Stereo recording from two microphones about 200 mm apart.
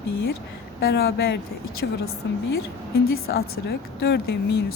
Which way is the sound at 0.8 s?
55° left (ahead or behind).